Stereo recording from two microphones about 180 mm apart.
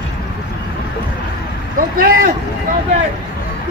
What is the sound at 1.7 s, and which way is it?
Vehicle, 50° right (ahead or behind).